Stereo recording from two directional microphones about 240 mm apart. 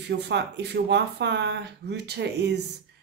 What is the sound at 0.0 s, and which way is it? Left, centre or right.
Speech, right.